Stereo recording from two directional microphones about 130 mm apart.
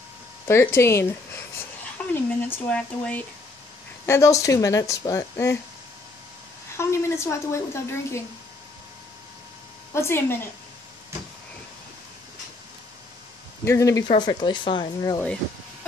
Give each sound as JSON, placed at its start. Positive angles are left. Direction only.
{"t": 0.5, "sound": "speech", "side_deg": 20}
{"t": 2.0, "sound": "a sound", "side_deg": 10}
{"t": 2.4, "sound": "speech", "side_deg": 10}
{"t": 4.0, "sound": "speech", "side_deg": 20}
{"t": 6.8, "sound": "speech", "side_deg": 20}
{"t": 9.9, "sound": "speech", "side_deg": 20}
{"t": 13.7, "sound": "speech", "side_deg": 25}
{"t": 14.2, "sound": "speech", "side_deg": 35}